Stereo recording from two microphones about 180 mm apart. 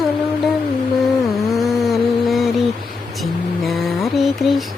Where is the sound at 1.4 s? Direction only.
Centre (ahead or behind).